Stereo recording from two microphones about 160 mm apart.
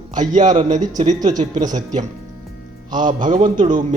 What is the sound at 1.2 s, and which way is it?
Speech, 25° right (ahead or behind).